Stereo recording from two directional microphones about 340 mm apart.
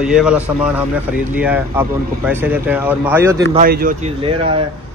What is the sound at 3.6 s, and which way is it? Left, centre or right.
Speech, right.